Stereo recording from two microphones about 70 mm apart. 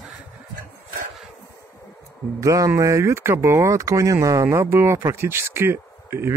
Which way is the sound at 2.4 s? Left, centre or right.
Right.